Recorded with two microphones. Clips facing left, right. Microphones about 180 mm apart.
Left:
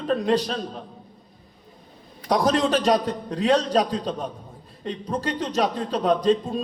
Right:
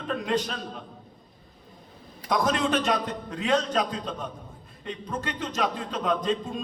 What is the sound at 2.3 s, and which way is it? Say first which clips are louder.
A man's voice: left 4 dB; 35° left (ahead or behind).